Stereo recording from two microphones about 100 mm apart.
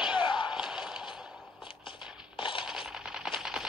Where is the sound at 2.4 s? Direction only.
55° left (ahead or behind).